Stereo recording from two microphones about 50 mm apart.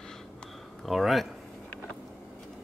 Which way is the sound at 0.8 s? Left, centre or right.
Centre.